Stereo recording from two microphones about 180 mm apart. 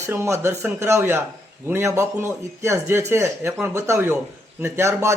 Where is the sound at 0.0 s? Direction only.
15° right (ahead or behind).